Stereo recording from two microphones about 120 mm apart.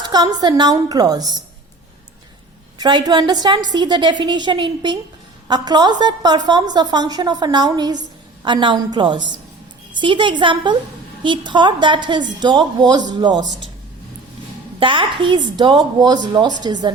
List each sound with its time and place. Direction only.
0.1 s a woman's voice: 35° right (ahead or behind)
2.7 s a woman's voice: 35° right (ahead or behind)
14.8 s a woman's voice: 45° right (ahead or behind)